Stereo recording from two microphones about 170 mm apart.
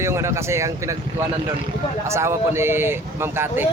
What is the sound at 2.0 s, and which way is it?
Speech, 15° right (ahead or behind).